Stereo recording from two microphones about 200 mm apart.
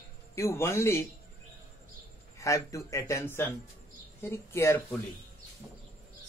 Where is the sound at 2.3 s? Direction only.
15° left (ahead or behind).